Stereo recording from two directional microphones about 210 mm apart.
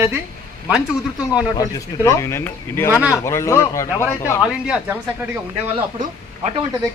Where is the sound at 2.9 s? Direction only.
5° right (ahead or behind).